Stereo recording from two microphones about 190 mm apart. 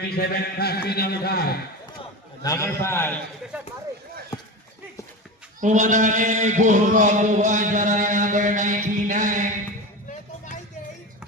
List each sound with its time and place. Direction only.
0.0 s a man's voice: 55° left (ahead or behind)
2.0 s a man's voice: 20° left (ahead or behind)
5.5 s speech: 40° right (ahead or behind)
10.1 s a sound: 40° left (ahead or behind)